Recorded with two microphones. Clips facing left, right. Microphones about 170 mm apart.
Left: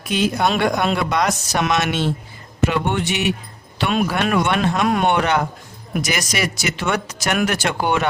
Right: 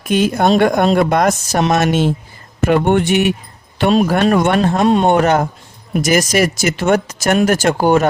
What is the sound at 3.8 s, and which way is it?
Speech, 35° right (ahead or behind).